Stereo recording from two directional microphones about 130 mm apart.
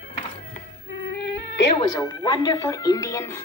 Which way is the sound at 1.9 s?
25° left (ahead or behind).